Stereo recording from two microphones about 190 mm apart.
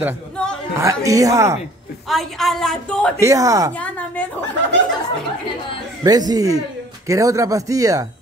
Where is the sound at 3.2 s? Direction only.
15° right (ahead or behind).